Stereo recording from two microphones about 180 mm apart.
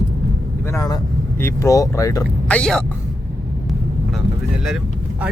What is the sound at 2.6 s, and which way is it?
Speech, 5° left (ahead or behind).